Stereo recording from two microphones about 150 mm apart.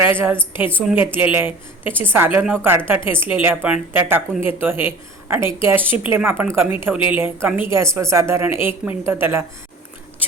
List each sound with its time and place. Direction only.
0.0 s a woman's voice: 15° right (ahead or behind)